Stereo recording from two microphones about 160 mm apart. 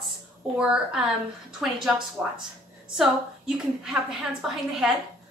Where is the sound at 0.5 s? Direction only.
5° right (ahead or behind).